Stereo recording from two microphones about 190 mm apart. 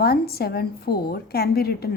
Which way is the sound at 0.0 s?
55° left (ahead or behind).